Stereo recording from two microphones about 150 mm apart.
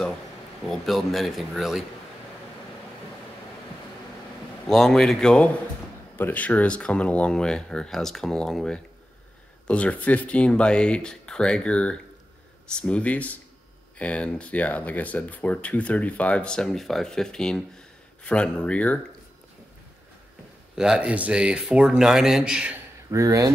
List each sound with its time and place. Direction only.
0.7 s speech: centre (ahead or behind)
4.6 s speech: 5° left (ahead or behind)
20.7 s speech: 5° right (ahead or behind)
23.0 s speech: 20° right (ahead or behind)